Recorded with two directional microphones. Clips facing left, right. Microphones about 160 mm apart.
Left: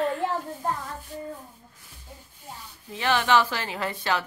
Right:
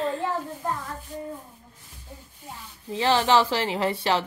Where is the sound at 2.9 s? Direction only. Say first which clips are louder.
Right 2 dB; 30° right (ahead or behind).